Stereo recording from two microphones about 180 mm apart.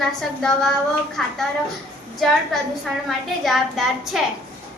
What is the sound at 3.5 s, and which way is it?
Speech, centre (ahead or behind).